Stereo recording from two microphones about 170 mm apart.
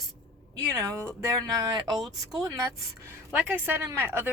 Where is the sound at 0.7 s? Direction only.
15° right (ahead or behind).